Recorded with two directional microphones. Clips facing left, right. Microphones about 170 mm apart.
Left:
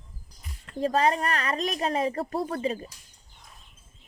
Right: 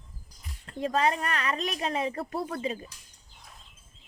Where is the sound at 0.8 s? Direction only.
35° left (ahead or behind).